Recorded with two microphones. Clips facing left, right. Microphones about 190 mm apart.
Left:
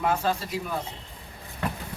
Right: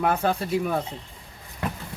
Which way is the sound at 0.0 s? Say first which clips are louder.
Right 2 dB; 60° right (ahead or behind).